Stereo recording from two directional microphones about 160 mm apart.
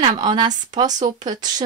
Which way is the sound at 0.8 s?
50° right (ahead or behind).